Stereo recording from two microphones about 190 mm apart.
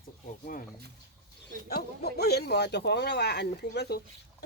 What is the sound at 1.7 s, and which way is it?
Speech, 60° left (ahead or behind).